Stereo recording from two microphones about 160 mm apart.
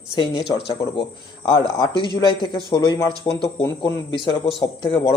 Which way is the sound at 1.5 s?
25° left (ahead or behind).